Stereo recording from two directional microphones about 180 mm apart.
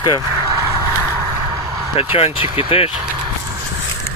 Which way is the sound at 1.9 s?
30° left (ahead or behind).